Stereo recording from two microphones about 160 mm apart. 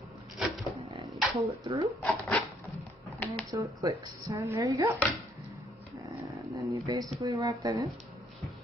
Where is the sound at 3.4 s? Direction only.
20° right (ahead or behind).